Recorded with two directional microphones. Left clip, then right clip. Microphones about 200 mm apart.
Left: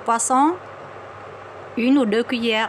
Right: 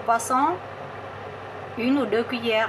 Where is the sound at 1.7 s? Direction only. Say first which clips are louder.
Left 4 dB; 50° left (ahead or behind).